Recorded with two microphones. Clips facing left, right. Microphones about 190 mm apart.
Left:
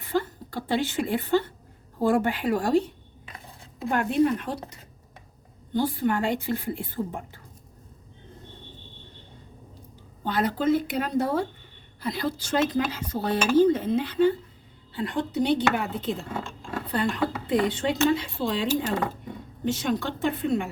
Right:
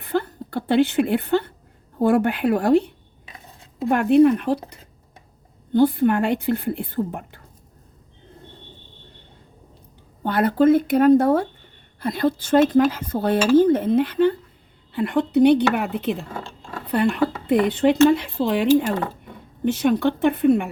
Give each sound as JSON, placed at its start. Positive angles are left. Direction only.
{"t": 0.0, "sound": "a sound", "side_deg": -60}
{"t": 2.0, "sound": "speech", "side_deg": -60}
{"t": 3.8, "sound": "speech", "side_deg": -65}
{"t": 5.7, "sound": "speech", "side_deg": -60}
{"t": 10.2, "sound": "speech", "side_deg": -60}
{"t": 17.5, "sound": "speech", "side_deg": -60}